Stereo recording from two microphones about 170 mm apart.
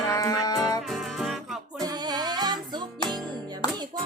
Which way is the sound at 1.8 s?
25° right (ahead or behind).